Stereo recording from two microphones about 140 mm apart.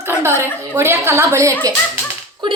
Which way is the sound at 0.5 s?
20° right (ahead or behind).